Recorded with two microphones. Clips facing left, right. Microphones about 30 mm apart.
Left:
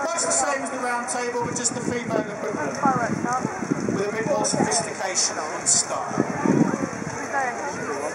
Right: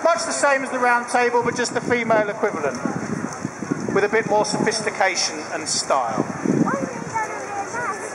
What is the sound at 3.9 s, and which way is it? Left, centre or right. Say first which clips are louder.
Speech: right 7 dB; centre.